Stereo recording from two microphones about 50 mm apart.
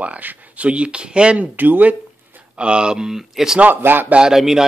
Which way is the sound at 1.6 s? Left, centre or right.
Right.